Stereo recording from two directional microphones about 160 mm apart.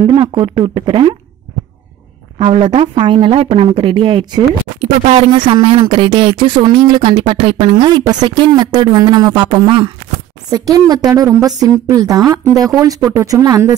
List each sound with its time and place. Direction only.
0.0 s speech: 30° right (ahead or behind)
2.3 s a woman's voice: 35° right (ahead or behind)